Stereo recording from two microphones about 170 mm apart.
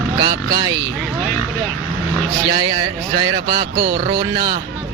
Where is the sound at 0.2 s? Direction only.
25° right (ahead or behind).